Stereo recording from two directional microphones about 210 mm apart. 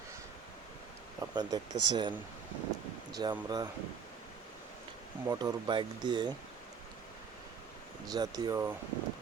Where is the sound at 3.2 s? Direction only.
20° right (ahead or behind).